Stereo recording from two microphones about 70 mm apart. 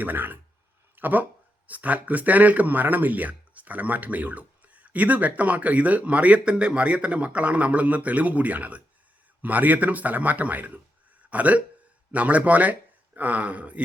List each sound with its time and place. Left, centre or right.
0.0 s speech: right